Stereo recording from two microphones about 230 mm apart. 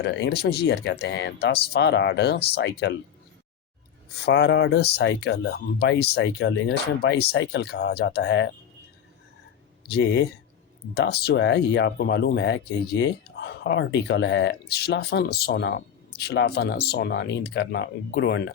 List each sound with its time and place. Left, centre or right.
0.0 s speech: left
4.3 s speech: left
9.9 s speech: left